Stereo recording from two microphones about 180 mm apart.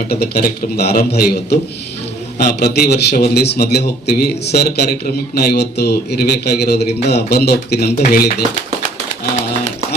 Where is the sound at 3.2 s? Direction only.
65° left (ahead or behind).